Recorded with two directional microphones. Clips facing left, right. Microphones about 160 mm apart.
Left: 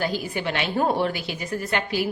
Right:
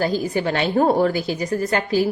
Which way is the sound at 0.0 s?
35° right (ahead or behind).